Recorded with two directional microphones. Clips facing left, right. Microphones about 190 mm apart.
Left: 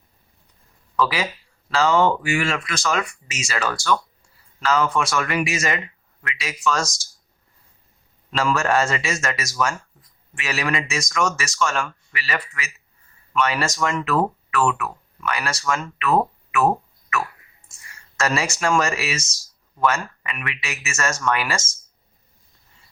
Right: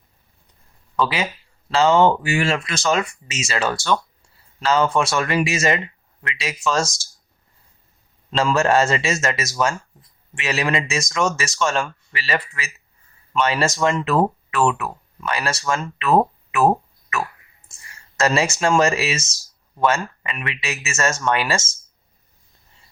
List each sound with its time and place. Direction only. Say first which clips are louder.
0.9 s speech: right 1 dB; 25° right (ahead or behind)
8.3 s speech: right 3 dB; 25° right (ahead or behind)